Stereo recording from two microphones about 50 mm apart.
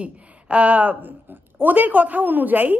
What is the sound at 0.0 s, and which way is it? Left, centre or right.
A woman's voice, right.